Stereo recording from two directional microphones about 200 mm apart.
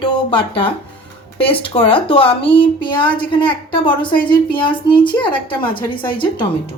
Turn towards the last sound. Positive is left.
turn(degrees=25)  # may be behind; listen again after turning